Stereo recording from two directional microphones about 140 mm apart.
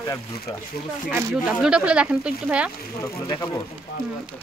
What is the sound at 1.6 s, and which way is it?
Speech, 5° right (ahead or behind).